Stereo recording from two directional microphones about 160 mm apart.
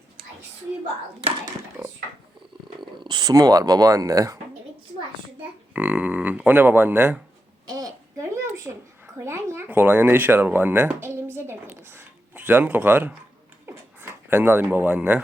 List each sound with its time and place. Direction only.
1.8 s speech: 10° right (ahead or behind)
3.0 s speech: 25° right (ahead or behind)
5.4 s speech: 10° right (ahead or behind)
7.7 s a sound: 20° right (ahead or behind)